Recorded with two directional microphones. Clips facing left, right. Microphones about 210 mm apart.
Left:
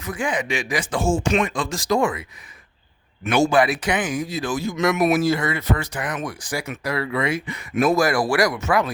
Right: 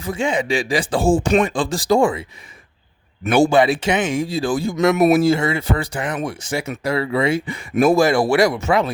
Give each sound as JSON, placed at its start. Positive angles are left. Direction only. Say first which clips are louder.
{"t": 0.0, "sound": "speech", "louder": "right 4 dB", "side_deg": -25}
{"t": 3.2, "sound": "speech", "louder": "right 4 dB", "side_deg": -30}